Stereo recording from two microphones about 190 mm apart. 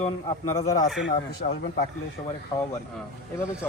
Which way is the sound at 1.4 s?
50° left (ahead or behind).